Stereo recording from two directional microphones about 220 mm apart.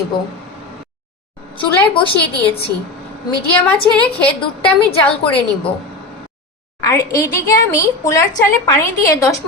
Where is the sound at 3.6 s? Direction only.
5° left (ahead or behind).